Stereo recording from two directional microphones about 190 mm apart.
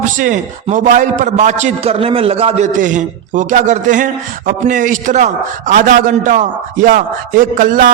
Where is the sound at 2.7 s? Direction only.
40° right (ahead or behind).